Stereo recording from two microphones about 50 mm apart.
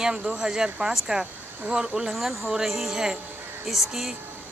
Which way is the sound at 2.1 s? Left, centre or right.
Centre.